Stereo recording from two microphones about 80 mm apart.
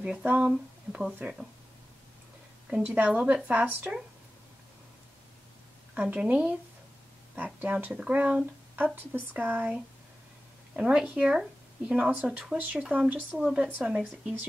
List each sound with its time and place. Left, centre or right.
0.0 s speech: centre
2.7 s speech: centre
5.9 s speech: centre
10.8 s speech: centre
13.4 s speech: centre